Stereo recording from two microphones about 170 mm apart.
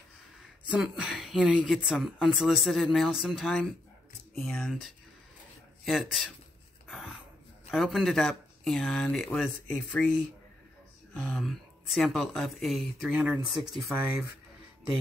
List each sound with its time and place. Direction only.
0.7 s a woman's voice: 5° right (ahead or behind)
6.9 s dog: centre (ahead or behind)
7.7 s a woman's voice: centre (ahead or behind)
11.1 s a woman's voice: 5° left (ahead or behind)